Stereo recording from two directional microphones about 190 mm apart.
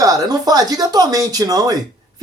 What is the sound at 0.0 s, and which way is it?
Speech, 20° right (ahead or behind).